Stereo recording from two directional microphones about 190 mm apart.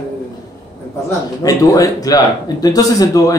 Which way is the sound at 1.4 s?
20° left (ahead or behind).